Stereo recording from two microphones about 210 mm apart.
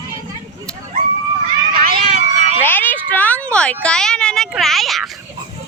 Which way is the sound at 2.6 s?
10° left (ahead or behind).